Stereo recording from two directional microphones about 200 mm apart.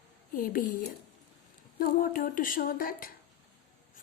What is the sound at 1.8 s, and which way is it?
A woman's voice, 45° left (ahead or behind).